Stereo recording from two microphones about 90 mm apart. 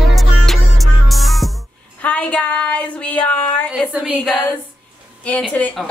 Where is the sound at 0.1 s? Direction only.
Centre (ahead or behind).